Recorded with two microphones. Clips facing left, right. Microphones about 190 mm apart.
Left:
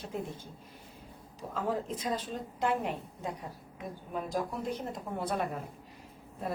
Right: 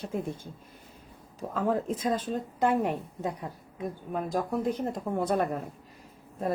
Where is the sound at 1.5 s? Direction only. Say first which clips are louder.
Right 5 dB; 45° right (ahead or behind).